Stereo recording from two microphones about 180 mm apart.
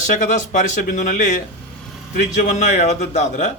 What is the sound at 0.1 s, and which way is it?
Speech, 45° left (ahead or behind).